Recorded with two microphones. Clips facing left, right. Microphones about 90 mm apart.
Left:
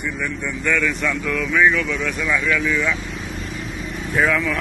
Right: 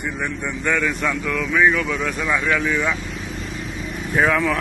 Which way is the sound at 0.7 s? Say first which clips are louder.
Even; 25° right (ahead or behind).